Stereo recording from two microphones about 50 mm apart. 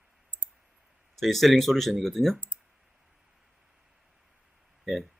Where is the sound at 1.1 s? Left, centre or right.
Centre.